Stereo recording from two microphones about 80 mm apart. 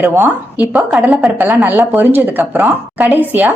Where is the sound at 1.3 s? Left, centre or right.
Right.